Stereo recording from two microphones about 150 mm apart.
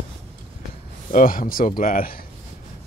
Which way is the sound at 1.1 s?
70° left (ahead or behind).